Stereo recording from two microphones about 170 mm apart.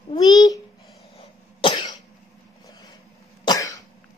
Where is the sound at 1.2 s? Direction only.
30° left (ahead or behind).